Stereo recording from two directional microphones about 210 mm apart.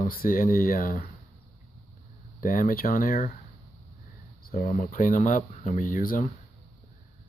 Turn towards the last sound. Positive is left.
turn(degrees=40)  # may be behind; listen again after turning